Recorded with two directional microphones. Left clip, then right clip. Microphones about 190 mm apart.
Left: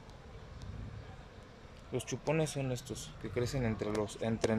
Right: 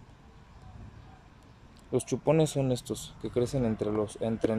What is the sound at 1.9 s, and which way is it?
Speech, 20° right (ahead or behind).